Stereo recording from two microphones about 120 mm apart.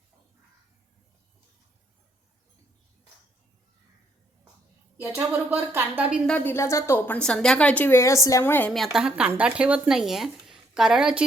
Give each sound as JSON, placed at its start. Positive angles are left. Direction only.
{"t": 4.9, "sound": "a woman's voice", "side_deg": -20}
{"t": 6.2, "sound": "a woman's voice", "side_deg": 15}
{"t": 8.7, "sound": "speech", "side_deg": 0}